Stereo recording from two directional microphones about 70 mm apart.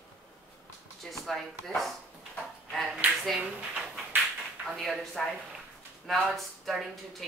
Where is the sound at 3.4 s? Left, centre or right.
Centre.